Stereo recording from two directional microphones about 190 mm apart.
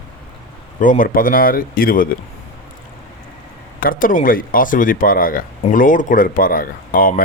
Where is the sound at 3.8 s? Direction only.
45° left (ahead or behind).